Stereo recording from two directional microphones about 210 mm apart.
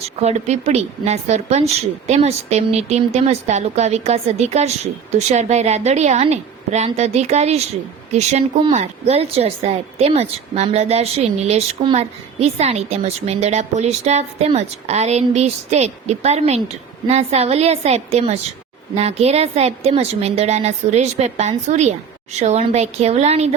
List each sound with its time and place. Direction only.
0.2 s speech: 30° right (ahead or behind)